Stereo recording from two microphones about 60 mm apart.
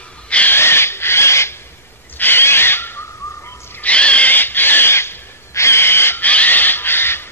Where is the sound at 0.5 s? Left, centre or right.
Left.